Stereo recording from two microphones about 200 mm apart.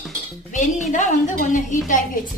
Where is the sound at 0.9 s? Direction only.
40° left (ahead or behind).